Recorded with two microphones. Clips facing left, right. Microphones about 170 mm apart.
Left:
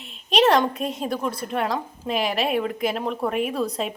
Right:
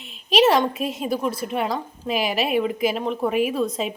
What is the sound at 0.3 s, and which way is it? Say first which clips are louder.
A woman's voice: right 1 dB; 5° right (ahead or behind).